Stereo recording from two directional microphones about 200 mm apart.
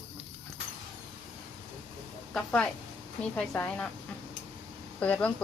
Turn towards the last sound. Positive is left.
turn(degrees=5)  # may be behind; listen again after turning